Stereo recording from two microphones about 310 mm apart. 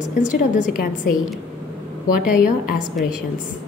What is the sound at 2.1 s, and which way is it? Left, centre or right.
Speech, left.